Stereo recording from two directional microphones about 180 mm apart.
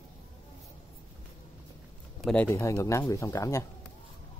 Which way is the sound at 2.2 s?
10° left (ahead or behind).